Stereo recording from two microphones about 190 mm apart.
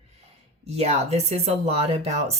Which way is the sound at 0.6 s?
35° right (ahead or behind).